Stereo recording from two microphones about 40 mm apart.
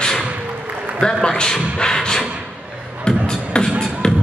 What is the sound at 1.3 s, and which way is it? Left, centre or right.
Beatboxing, centre.